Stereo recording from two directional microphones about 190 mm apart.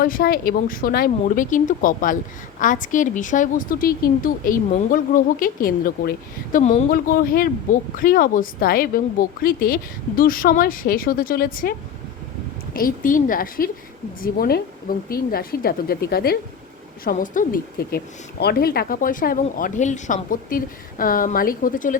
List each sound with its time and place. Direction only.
0.0 s a woman's voice: 50° left (ahead or behind)
12.7 s a woman's voice: 45° left (ahead or behind)